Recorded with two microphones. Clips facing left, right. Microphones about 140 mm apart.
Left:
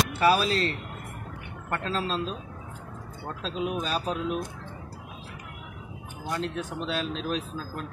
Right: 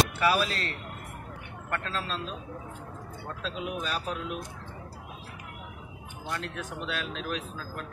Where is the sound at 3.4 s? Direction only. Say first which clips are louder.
Left 4 dB; 25° left (ahead or behind).